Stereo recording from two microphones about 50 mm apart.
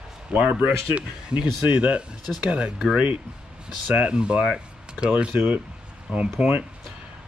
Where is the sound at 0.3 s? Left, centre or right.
Right.